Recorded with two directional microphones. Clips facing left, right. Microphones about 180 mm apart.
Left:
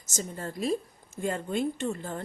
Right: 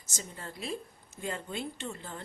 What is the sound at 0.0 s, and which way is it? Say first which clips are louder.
Speech: left 8 dB; 45° left (ahead or behind).